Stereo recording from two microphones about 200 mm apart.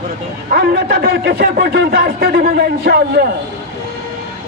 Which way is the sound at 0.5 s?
55° right (ahead or behind).